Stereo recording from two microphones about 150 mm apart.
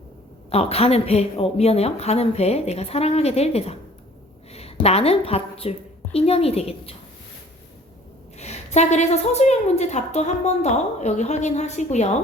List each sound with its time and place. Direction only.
0.5 s a woman's voice: 40° left (ahead or behind)
8.4 s a woman's voice: 50° left (ahead or behind)